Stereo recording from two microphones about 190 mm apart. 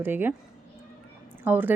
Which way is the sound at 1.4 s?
10° right (ahead or behind).